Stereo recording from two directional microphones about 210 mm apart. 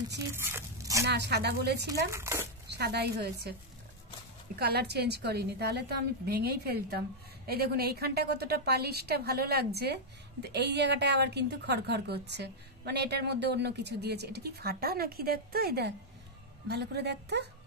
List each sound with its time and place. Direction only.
0.3 s speech: 10° right (ahead or behind)
1.0 s a woman's voice: 55° right (ahead or behind)
2.0 s speech: 15° right (ahead or behind)
2.7 s a woman's voice: 50° right (ahead or behind)
4.6 s a woman's voice: 50° right (ahead or behind)